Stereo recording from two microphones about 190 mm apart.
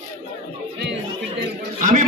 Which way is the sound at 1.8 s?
40° right (ahead or behind).